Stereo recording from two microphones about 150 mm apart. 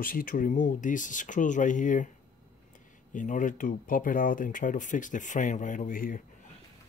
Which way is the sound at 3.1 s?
60° left (ahead or behind).